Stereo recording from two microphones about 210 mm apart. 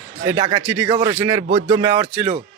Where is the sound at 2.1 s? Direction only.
Centre (ahead or behind).